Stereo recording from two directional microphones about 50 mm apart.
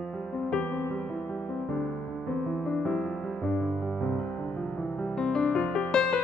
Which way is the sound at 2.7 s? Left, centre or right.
Centre.